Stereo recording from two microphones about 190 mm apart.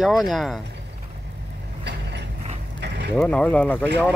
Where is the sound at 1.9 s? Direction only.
60° right (ahead or behind).